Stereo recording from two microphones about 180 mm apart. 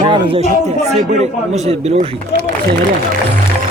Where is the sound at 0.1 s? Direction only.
30° right (ahead or behind).